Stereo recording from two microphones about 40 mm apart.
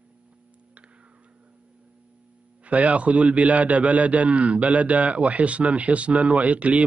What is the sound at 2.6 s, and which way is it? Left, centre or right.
A man's voice, right.